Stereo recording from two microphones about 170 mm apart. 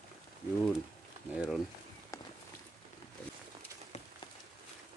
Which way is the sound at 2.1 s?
20° left (ahead or behind).